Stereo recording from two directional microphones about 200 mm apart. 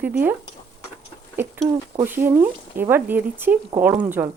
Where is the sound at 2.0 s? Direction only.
10° right (ahead or behind).